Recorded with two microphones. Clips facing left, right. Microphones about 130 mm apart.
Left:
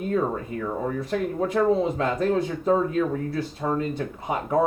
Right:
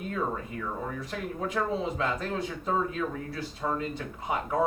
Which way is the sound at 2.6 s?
50° left (ahead or behind).